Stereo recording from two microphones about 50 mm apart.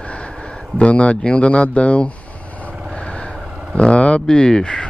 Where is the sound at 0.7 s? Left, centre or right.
Left.